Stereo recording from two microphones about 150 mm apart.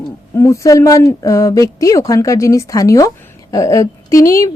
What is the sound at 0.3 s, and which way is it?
A woman's voice, 20° left (ahead or behind).